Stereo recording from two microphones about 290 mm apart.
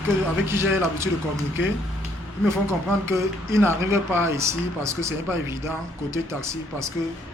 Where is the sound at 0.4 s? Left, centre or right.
Centre.